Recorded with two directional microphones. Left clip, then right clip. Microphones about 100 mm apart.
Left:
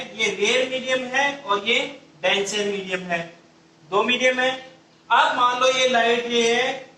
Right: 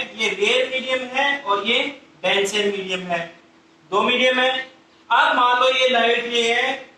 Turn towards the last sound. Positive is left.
turn(degrees=-25)  # may be behind; listen again after turning